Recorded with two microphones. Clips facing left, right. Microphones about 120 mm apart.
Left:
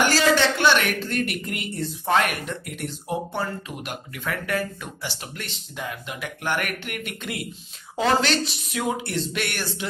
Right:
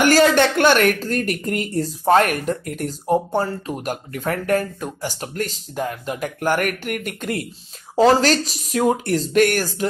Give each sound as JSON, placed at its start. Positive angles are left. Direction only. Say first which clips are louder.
{"t": 0.0, "sound": "speech", "louder": "right 5 dB", "side_deg": -50}